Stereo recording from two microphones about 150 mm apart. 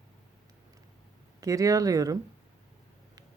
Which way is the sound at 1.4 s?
20° right (ahead or behind).